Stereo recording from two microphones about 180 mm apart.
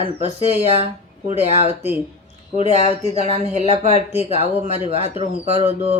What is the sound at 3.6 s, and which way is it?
Speech, 35° left (ahead or behind).